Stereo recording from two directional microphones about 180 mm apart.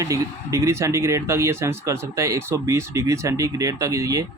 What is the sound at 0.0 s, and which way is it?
Speech, 15° right (ahead or behind).